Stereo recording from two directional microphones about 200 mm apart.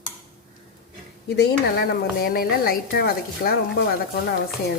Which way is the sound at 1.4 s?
50° left (ahead or behind).